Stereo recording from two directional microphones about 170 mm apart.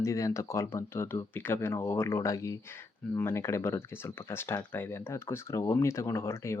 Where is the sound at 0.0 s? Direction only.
20° left (ahead or behind).